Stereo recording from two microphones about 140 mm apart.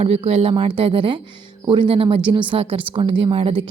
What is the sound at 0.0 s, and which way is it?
Speech, 45° right (ahead or behind).